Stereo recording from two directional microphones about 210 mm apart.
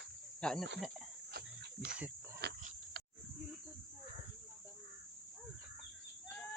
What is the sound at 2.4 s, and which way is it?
Oink, 50° right (ahead or behind).